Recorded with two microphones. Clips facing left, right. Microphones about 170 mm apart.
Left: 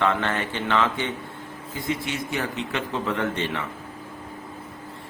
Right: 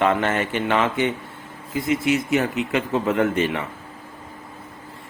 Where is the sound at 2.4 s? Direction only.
15° right (ahead or behind).